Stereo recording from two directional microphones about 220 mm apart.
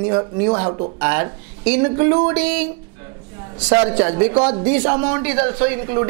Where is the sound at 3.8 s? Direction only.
25° right (ahead or behind).